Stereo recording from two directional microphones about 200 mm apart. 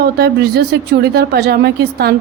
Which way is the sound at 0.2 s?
55° right (ahead or behind).